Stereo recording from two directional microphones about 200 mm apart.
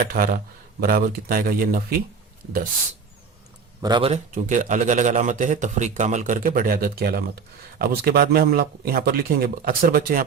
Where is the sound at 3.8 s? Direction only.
20° right (ahead or behind); by 10.2 s 45° right (ahead or behind).